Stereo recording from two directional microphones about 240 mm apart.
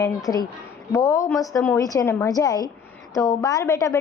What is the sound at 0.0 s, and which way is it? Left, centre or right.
A woman's voice, centre.